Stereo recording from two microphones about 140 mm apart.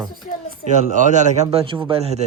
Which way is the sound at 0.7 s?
60° right (ahead or behind).